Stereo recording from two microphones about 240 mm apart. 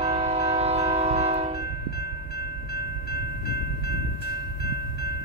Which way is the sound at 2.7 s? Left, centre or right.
Left.